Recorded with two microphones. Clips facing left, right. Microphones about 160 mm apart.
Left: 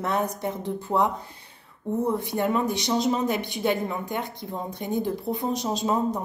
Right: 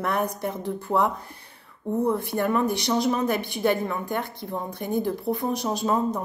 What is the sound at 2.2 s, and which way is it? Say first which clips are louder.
Speech: right 1 dB; 20° left (ahead or behind).